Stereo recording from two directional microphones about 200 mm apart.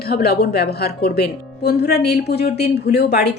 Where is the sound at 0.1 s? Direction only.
50° left (ahead or behind).